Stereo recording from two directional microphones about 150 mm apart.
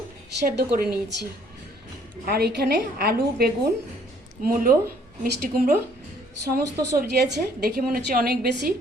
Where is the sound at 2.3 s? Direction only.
90° right.